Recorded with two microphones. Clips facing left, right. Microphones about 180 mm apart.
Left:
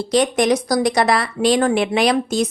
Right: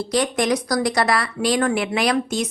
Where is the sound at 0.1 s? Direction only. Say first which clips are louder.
Left 5 dB; 20° left (ahead or behind).